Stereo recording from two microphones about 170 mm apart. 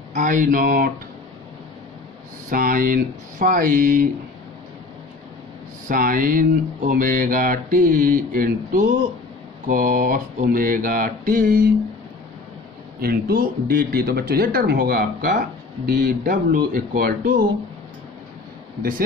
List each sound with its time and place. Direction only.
0.1 s speech: 50° right (ahead or behind)
2.5 s speech: 55° right (ahead or behind)
5.9 s speech: 55° right (ahead or behind)
13.0 s speech: 60° right (ahead or behind)
15.8 s speech: 50° right (ahead or behind)
18.8 s speech: 55° right (ahead or behind)